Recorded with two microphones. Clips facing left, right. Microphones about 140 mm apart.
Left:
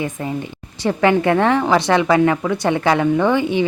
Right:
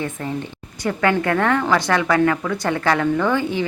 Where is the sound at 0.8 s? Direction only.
20° left (ahead or behind).